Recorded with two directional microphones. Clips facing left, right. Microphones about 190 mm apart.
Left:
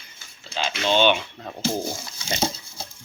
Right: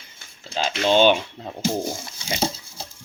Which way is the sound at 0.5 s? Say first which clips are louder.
Right 3 dB; 40° right (ahead or behind).